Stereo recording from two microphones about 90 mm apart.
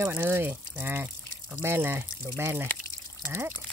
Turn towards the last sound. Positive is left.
turn(degrees=-25)  # may be behind; listen again after turning